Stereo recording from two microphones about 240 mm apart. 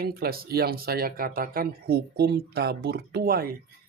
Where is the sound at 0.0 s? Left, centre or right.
Right.